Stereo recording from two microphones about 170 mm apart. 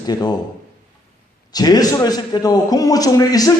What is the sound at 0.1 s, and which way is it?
Speech, 25° left (ahead or behind).